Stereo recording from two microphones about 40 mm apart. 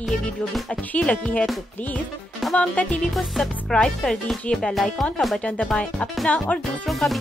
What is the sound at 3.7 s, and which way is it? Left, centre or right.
Speech, centre.